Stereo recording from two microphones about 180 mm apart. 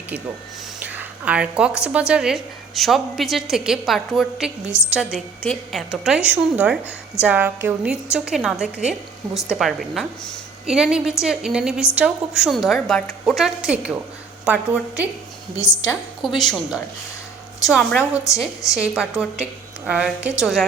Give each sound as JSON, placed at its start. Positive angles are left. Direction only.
{"t": 0.9, "sound": "a woman's voice", "side_deg": -5}
{"t": 15.5, "sound": "a woman's voice", "side_deg": 15}
{"t": 16.2, "sound": "a woman's voice", "side_deg": 0}